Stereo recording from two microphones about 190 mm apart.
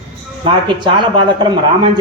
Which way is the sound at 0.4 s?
25° right (ahead or behind).